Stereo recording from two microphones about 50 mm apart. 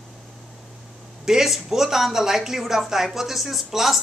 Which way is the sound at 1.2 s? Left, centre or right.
Centre.